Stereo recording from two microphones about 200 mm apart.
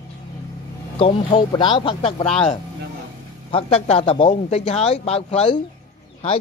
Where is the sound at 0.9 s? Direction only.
25° left (ahead or behind).